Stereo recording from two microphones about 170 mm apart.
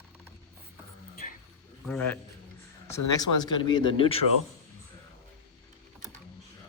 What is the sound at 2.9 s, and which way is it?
Speech, 25° left (ahead or behind).